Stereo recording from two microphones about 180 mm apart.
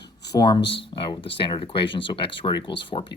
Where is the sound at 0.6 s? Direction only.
75° left (ahead or behind).